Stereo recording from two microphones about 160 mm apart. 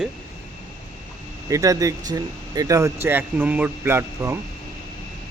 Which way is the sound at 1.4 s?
20° right (ahead or behind).